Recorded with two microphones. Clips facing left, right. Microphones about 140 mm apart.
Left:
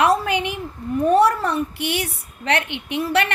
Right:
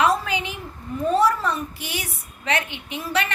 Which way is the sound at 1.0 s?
60° left (ahead or behind).